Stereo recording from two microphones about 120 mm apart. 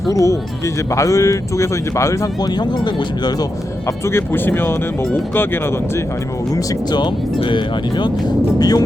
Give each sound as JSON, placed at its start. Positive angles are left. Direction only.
{"t": 0.1, "sound": "speech", "side_deg": 25}
{"t": 2.6, "sound": "speech", "side_deg": 35}
{"t": 4.0, "sound": "speech", "side_deg": 20}
{"t": 6.9, "sound": "speech", "side_deg": 40}